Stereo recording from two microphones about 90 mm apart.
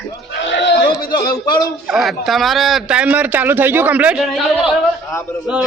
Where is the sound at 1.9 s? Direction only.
Centre (ahead or behind); by 4.2 s 15° right (ahead or behind).